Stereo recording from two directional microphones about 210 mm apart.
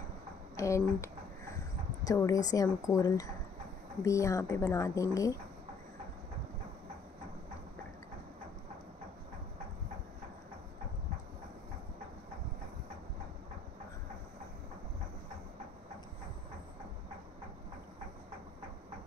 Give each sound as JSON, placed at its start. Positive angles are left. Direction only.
{"t": 0.6, "sound": "a woman's voice", "side_deg": 15}